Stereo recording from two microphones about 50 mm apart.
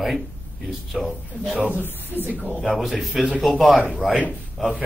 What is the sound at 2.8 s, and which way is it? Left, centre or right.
A man's voice, centre.